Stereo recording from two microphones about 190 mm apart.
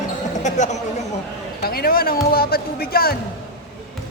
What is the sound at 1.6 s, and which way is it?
Speech, 55° left (ahead or behind).